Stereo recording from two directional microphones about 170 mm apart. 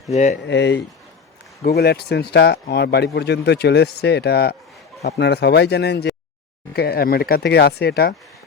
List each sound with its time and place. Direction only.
0.1 s speech: 45° left (ahead or behind)
0.4 s speech: 90° left
1.6 s speech: 70° left (ahead or behind)
6.7 s speech: 65° left (ahead or behind)